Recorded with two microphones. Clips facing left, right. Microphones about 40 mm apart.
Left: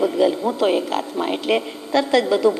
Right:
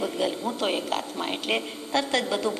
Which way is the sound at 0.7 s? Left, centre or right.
Left.